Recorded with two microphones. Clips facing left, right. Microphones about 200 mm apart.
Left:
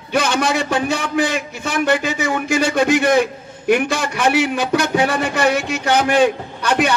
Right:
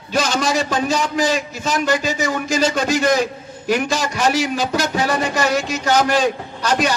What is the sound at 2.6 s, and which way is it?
A man's voice, 60° left (ahead or behind).